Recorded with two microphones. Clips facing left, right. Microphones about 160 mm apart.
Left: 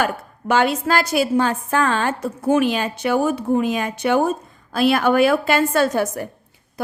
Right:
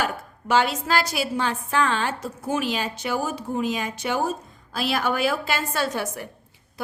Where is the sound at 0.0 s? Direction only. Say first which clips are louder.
Left 5 dB; 55° left (ahead or behind).